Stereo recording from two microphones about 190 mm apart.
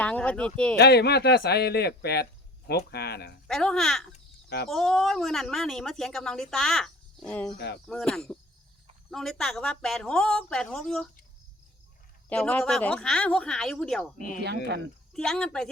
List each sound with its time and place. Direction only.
0.0 s speech: 5° left (ahead or behind)
0.8 s a man's voice: 60° left (ahead or behind)
3.4 s speech: 5° left (ahead or behind)
4.4 s speech: 60° left (ahead or behind)
4.7 s speech: centre (ahead or behind)
7.5 s a man's voice: 60° left (ahead or behind)
7.9 s speech: 5° left (ahead or behind)
12.3 s speech: 5° left (ahead or behind)
14.2 s speech: 45° left (ahead or behind)
15.1 s speech: 5° left (ahead or behind)